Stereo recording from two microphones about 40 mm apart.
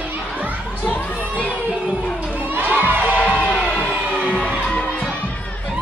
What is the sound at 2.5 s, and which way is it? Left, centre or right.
Crowd, right.